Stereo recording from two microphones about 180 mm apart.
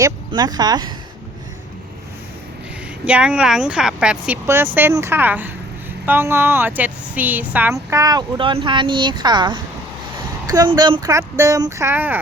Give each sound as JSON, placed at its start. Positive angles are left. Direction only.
{"t": 0.0, "sound": "speech", "side_deg": -20}
{"t": 3.1, "sound": "speech", "side_deg": -5}